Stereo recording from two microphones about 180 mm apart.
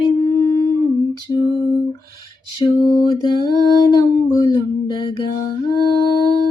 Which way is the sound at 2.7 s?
25° left (ahead or behind).